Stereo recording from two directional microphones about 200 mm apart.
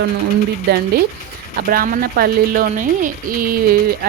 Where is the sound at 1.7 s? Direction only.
50° right (ahead or behind).